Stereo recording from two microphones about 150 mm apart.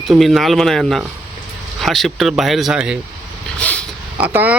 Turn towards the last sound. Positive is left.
turn(degrees=-10)  # may be behind; listen again after turning